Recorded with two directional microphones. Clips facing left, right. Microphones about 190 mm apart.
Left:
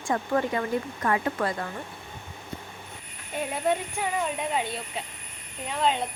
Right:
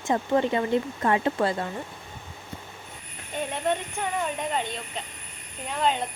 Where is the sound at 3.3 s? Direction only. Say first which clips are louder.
Left 1 dB; 5° left (ahead or behind).